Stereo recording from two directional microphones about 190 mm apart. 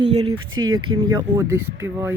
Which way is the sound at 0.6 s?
90° right.